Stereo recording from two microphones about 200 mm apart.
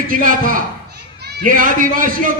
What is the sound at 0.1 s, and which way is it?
A child's voice, 45° right (ahead or behind).